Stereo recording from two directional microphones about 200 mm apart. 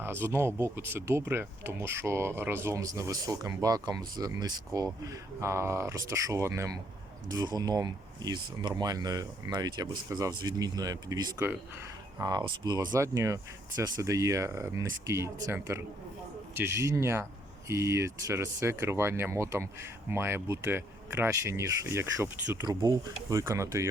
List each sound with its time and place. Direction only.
0.0 s speech: 10° right (ahead or behind)